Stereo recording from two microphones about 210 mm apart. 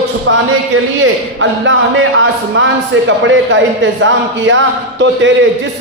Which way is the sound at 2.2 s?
65° right (ahead or behind).